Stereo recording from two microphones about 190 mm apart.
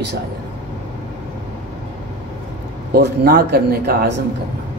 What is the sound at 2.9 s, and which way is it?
Speech, 55° right (ahead or behind).